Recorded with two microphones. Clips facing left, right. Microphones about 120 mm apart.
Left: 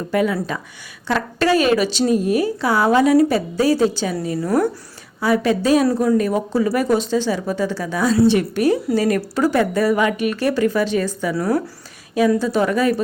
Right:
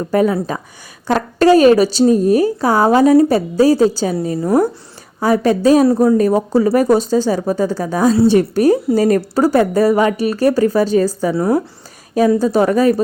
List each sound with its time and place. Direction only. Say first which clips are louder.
0.1 s a woman's voice: right 4 dB; 35° right (ahead or behind)
11.3 s speech: right 4 dB; 25° right (ahead or behind)
12.4 s a woman's voice: right 5 dB; 40° right (ahead or behind)